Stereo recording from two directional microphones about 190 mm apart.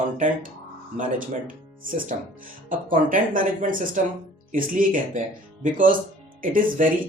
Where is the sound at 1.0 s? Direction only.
45° right (ahead or behind).